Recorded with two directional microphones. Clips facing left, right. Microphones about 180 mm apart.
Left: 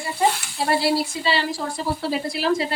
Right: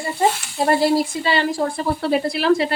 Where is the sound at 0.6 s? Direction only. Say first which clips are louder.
Right 4 dB; 45° right (ahead or behind).